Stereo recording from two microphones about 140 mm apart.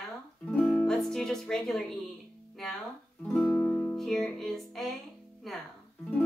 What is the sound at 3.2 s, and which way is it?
Music, 10° left (ahead or behind).